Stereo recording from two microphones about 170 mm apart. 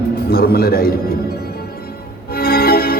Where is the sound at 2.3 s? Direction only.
60° left (ahead or behind).